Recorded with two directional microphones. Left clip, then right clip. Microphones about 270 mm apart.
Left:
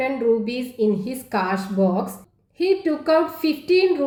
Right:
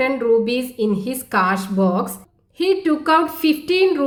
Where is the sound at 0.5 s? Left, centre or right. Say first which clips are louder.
Right 1 dB; right.